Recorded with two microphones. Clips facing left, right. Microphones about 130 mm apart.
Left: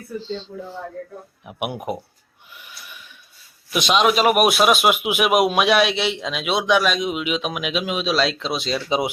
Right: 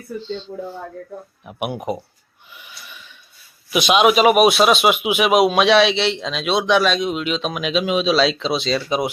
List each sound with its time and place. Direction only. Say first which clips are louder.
0.2 s speech: even; 35° left (ahead or behind)
1.5 s speech: right 2 dB; 10° left (ahead or behind)
2.5 s snort: right 1 dB; centre (ahead or behind)
3.7 s speech: right 3 dB; 5° right (ahead or behind)